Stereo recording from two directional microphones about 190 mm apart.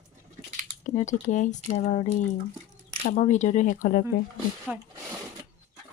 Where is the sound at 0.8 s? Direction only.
40° left (ahead or behind).